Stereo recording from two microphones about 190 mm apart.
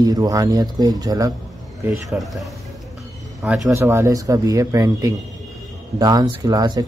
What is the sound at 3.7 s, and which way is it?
Speech, 15° right (ahead or behind).